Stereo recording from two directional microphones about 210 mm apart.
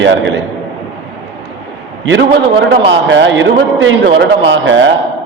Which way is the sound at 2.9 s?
55° right (ahead or behind).